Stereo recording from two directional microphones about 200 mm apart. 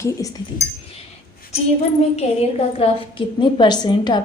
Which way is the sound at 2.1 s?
30° left (ahead or behind).